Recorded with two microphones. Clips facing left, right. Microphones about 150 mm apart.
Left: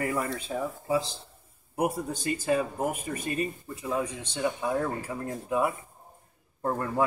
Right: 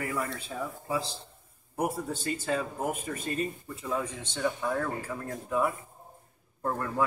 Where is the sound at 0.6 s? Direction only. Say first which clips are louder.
Left 4 dB; 20° left (ahead or behind).